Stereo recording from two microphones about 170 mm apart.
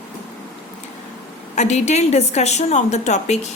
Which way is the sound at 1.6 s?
40° left (ahead or behind).